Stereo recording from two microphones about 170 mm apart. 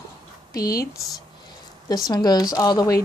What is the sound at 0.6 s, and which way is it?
Speech, 60° left (ahead or behind).